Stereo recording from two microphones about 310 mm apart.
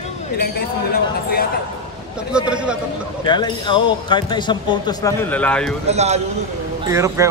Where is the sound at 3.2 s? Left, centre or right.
Centre.